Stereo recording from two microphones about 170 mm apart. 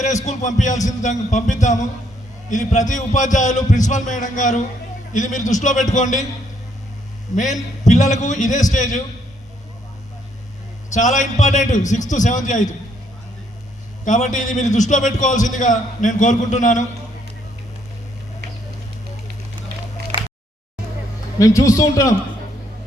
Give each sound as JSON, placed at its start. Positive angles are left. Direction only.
{"t": 0.0, "sound": "a man's voice", "side_deg": 45}
{"t": 7.3, "sound": "a man's voice", "side_deg": 45}
{"t": 10.9, "sound": "a man's voice", "side_deg": 45}
{"t": 14.0, "sound": "a man's voice", "side_deg": 45}
{"t": 21.3, "sound": "a man's voice", "side_deg": 20}